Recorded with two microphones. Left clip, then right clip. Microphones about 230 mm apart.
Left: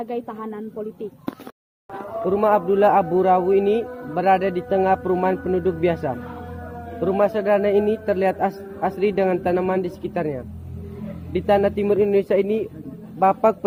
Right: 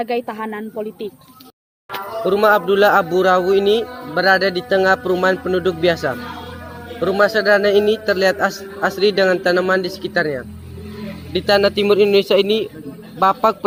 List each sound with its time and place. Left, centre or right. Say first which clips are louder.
0.0 s a woman's voice: right 7 dB; right
2.3 s a man's voice: right 4 dB; centre
11.3 s a man's voice: right 4 dB; centre